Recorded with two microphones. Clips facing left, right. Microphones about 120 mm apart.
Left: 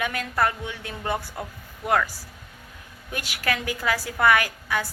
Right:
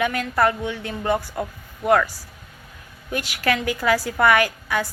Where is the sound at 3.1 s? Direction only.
30° right (ahead or behind).